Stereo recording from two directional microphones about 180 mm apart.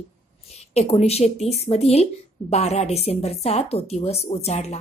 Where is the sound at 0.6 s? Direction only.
35° left (ahead or behind).